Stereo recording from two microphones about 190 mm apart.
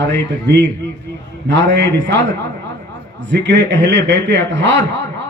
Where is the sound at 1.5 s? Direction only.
70° right (ahead or behind).